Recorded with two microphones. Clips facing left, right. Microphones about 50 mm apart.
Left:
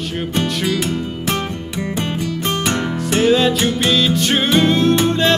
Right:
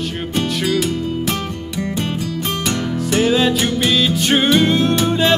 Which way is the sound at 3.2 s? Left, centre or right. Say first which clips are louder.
Left 2 dB; centre.